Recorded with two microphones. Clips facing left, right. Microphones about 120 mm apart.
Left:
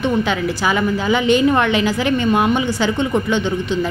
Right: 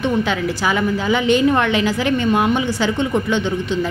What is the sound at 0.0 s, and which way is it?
A woman's voice, 15° left (ahead or behind).